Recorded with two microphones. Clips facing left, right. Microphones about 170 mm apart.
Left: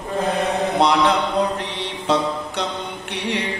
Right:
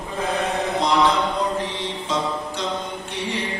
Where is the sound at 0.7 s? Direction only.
65° left (ahead or behind).